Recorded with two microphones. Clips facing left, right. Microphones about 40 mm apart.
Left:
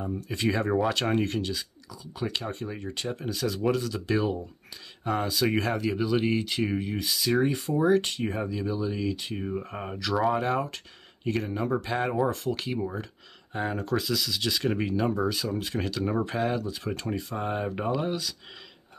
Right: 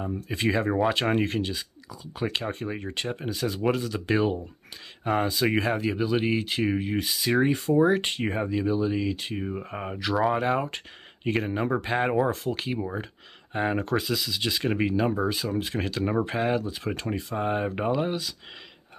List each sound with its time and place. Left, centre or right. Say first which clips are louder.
0.1 s speech: right 2 dB; centre
11.2 s speech: right 2 dB; right
12.4 s speech: right 1 dB; right
13.5 s speech: right 3 dB; right
14.0 s speech: right 1 dB; centre